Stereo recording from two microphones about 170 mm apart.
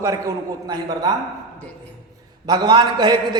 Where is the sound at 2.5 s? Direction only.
25° right (ahead or behind).